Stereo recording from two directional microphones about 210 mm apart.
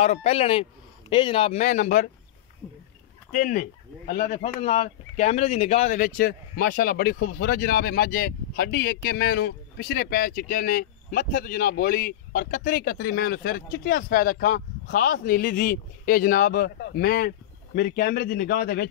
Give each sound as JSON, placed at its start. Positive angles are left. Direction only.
{"t": 0.0, "sound": "speech", "side_deg": 30}
{"t": 3.3, "sound": "speech", "side_deg": 40}